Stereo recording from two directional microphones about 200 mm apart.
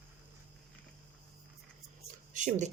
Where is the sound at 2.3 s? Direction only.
40° right (ahead or behind).